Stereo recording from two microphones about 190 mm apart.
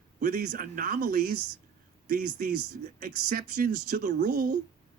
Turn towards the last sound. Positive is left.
turn(degrees=-55)  # may be behind; listen again after turning